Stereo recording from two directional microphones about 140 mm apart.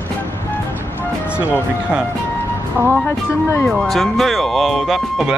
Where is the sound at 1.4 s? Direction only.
10° right (ahead or behind).